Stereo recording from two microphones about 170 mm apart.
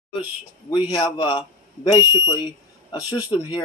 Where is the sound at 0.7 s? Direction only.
25° left (ahead or behind).